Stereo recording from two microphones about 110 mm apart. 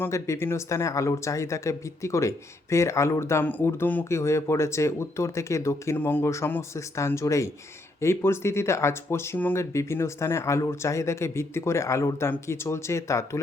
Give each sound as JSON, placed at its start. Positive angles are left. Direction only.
{"t": 0.0, "sound": "speech", "side_deg": 25}